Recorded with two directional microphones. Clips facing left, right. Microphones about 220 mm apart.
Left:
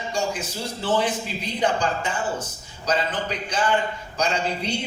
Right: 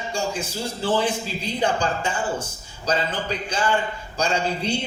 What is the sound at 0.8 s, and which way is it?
A man's voice, 30° right (ahead or behind).